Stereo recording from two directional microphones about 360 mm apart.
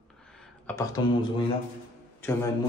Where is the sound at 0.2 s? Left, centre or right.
Centre.